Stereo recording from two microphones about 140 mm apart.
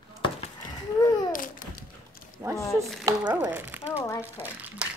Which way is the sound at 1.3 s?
75° left (ahead or behind).